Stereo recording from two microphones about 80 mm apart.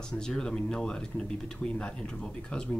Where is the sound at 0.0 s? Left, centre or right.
Centre.